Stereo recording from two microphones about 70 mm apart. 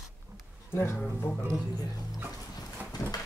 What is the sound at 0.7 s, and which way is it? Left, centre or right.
Speech, left.